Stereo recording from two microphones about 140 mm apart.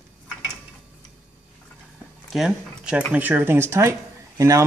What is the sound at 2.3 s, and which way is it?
Speech, 5° right (ahead or behind).